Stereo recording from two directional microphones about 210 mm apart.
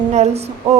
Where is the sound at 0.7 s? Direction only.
30° right (ahead or behind).